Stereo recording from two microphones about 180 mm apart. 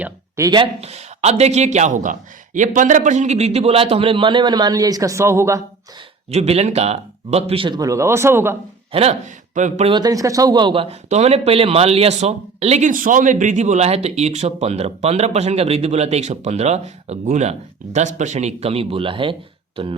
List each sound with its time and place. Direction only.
0.0 s speech: 20° right (ahead or behind)
6.3 s speech: 35° right (ahead or behind); by 8.5 s 15° right (ahead or behind)
8.9 s speech: 35° right (ahead or behind)
9.9 s speech: 20° right (ahead or behind)
11.1 s speech: 35° right (ahead or behind)